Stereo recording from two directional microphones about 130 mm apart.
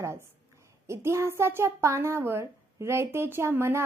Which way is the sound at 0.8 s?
20° right (ahead or behind).